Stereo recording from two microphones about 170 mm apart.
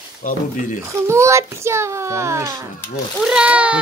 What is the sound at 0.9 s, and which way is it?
A child's voice, 15° right (ahead or behind).